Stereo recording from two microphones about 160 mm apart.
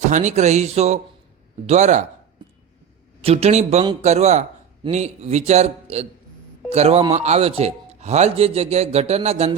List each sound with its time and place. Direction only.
0.0 s a man's voice: 45° right (ahead or behind)
2.4 s a sound: 30° right (ahead or behind)
3.2 s a man's voice: 40° right (ahead or behind)